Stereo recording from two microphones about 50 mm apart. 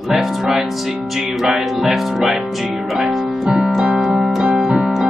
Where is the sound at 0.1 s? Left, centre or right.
Centre.